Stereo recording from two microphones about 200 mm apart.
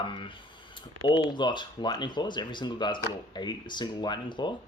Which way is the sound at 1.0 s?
25° left (ahead or behind).